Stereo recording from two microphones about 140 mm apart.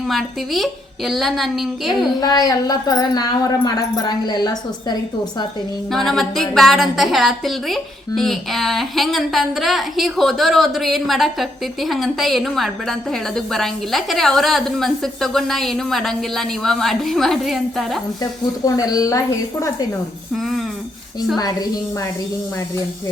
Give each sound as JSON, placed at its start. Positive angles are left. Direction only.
{"t": 0.1, "sound": "a woman's voice", "side_deg": 0}
{"t": 2.2, "sound": "a woman's voice", "side_deg": 30}
{"t": 5.9, "sound": "a woman's voice", "side_deg": 0}
{"t": 18.2, "sound": "a woman's voice", "side_deg": 25}
{"t": 20.3, "sound": "a sound", "side_deg": 0}
{"t": 21.3, "sound": "a woman's voice", "side_deg": 25}